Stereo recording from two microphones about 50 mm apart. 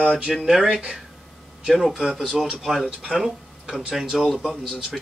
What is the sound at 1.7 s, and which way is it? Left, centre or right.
Speech, centre.